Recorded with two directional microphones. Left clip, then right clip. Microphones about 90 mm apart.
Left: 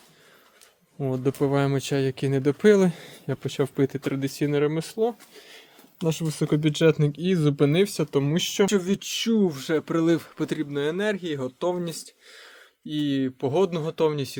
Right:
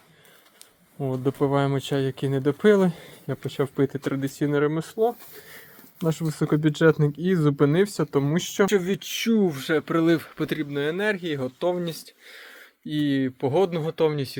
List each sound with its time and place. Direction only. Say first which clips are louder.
0.9 s speech: even; 35° left (ahead or behind); by 3.8 s 55° left (ahead or behind)
3.8 s speech: even; 40° left (ahead or behind)
6.1 s speech: right 1 dB; 15° left (ahead or behind)
9.5 s speech: right 2 dB; 25° left (ahead or behind)
10.7 s speech: left 1 dB; 40° left (ahead or behind)
11.1 s speech: right 1 dB; 15° left (ahead or behind); by 13.7 s 30° left (ahead or behind)
13.7 s speech: right 1 dB; 50° left (ahead or behind)